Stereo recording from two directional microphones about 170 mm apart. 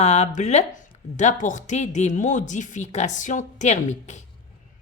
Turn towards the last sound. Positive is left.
turn(degrees=45)  # may be behind; listen again after turning